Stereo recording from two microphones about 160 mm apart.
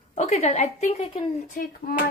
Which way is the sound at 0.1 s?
45° left (ahead or behind).